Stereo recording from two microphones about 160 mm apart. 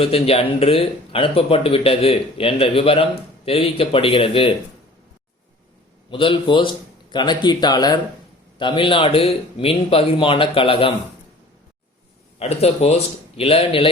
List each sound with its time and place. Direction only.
0.0 s speech: 40° left (ahead or behind)
6.1 s a man's voice: 30° left (ahead or behind)
12.4 s speech: 40° left (ahead or behind)